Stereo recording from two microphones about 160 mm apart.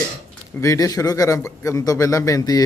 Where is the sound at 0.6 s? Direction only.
20° left (ahead or behind).